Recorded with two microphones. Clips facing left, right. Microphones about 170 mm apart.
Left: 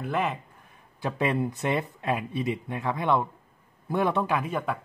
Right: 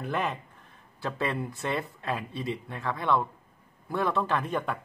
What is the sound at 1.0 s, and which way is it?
Speech, 20° left (ahead or behind).